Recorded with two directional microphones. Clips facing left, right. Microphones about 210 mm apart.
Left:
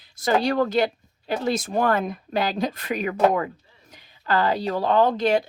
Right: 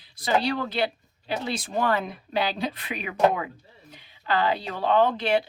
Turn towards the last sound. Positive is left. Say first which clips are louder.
# left 3 dB
turn(degrees=45)  # may be behind; listen again after turning